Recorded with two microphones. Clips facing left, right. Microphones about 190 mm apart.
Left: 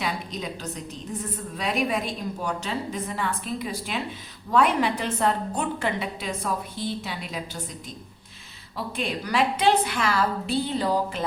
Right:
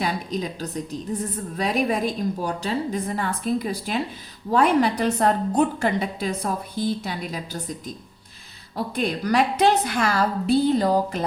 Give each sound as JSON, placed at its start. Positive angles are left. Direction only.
{"t": 0.0, "sound": "a sound", "side_deg": -35}
{"t": 1.5, "sound": "a woman's voice", "side_deg": -35}
{"t": 8.7, "sound": "a woman's voice", "side_deg": -45}